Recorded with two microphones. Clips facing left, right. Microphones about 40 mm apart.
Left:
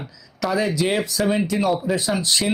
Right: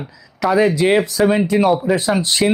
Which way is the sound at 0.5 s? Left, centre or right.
Right.